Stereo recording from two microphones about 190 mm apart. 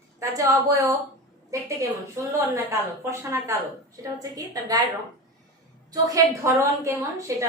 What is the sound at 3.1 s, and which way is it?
A woman's voice, 15° right (ahead or behind).